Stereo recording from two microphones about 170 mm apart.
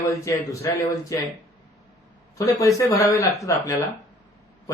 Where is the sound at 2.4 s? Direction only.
20° left (ahead or behind).